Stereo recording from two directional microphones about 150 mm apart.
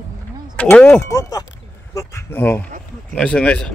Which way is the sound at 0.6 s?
10° left (ahead or behind).